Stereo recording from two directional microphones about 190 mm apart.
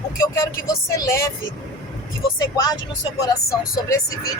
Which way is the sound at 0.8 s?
15° left (ahead or behind).